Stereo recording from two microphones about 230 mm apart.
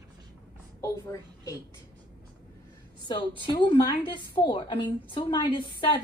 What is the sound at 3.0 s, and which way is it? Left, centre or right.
A woman's voice, left.